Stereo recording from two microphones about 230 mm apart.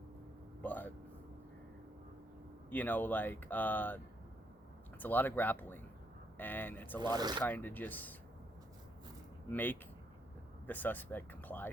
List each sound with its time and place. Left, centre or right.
0.6 s vehicle: centre
2.6 s speech: centre
7.0 s speech: centre
7.4 s speech: centre
9.5 s speech: centre